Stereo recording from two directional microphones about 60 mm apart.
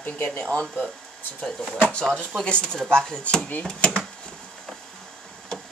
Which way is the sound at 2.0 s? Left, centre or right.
Centre.